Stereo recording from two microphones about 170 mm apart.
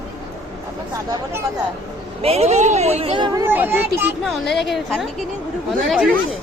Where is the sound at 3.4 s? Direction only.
10° right (ahead or behind).